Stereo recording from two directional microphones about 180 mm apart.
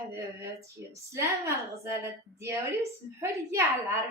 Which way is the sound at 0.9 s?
15° right (ahead or behind).